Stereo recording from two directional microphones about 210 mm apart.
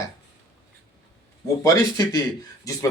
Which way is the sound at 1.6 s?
15° left (ahead or behind).